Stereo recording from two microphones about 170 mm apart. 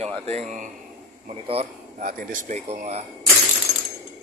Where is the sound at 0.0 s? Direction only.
35° right (ahead or behind).